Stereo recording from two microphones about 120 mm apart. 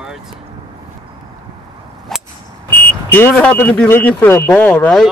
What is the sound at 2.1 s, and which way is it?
Clang, 5° left (ahead or behind).